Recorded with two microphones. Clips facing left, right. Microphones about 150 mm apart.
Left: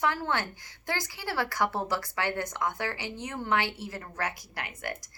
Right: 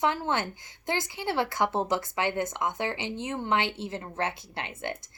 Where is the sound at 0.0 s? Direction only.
20° right (ahead or behind).